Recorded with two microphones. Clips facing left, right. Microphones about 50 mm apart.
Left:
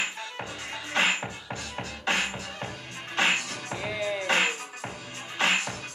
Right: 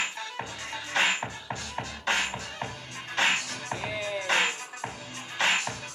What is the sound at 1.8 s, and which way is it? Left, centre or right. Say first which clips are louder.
Music: even; left.